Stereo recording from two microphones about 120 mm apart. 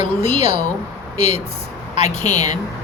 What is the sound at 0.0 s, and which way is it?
Speech, 65° left (ahead or behind).